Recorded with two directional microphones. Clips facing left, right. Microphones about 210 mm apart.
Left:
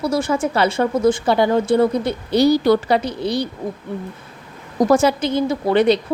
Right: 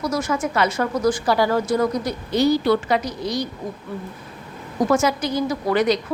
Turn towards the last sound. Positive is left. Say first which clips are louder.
# left 4 dB
turn(degrees=30)  # may be behind; listen again after turning